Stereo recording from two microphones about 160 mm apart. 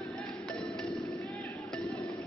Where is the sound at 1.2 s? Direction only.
20° left (ahead or behind).